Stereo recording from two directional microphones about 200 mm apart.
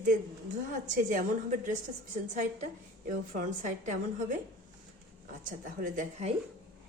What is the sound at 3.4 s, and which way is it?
Speech, 40° right (ahead or behind).